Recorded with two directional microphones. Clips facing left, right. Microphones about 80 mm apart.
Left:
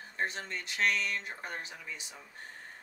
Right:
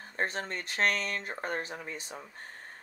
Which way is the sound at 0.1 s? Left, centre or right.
Right.